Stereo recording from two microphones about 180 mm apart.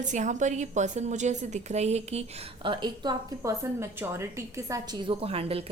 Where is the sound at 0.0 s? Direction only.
40° right (ahead or behind).